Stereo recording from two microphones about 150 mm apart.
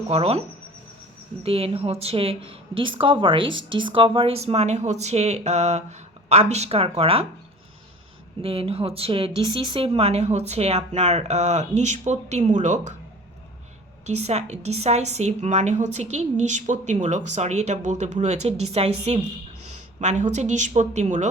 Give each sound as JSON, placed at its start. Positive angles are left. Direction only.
{"t": 0.1, "sound": "a woman's voice", "side_deg": -45}
{"t": 1.5, "sound": "a woman's voice", "side_deg": -40}
{"t": 8.4, "sound": "a woman's voice", "side_deg": -40}
{"t": 14.1, "sound": "a woman's voice", "side_deg": -45}